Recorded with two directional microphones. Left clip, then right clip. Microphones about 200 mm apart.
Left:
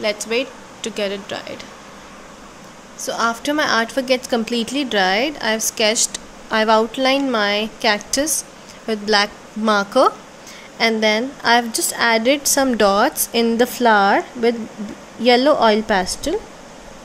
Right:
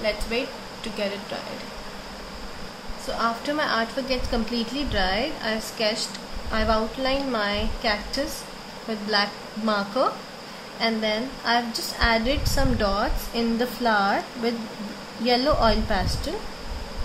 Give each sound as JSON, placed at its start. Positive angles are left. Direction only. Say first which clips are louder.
{"t": 0.0, "sound": "speech", "louder": "left 6 dB", "side_deg": 65}
{"t": 3.1, "sound": "a woman's voice", "louder": "left 6 dB", "side_deg": 60}